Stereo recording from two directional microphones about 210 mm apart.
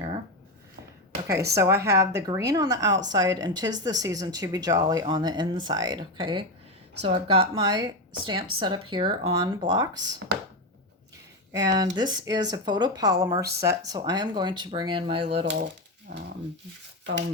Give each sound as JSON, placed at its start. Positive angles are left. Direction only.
{"t": 1.3, "sound": "speech", "side_deg": -15}
{"t": 11.5, "sound": "speech", "side_deg": -20}